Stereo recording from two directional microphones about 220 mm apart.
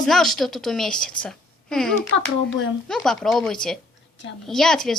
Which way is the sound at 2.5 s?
60° left (ahead or behind).